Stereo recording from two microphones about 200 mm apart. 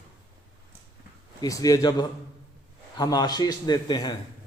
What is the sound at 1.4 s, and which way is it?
A man's voice, 20° left (ahead or behind).